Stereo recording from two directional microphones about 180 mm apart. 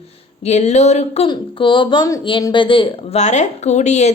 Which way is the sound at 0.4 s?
40° left (ahead or behind).